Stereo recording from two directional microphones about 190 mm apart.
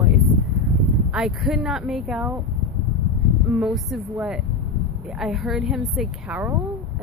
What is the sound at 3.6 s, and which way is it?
Speech, centre (ahead or behind).